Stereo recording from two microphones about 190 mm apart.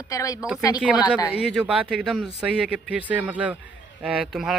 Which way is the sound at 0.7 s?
5° right (ahead or behind).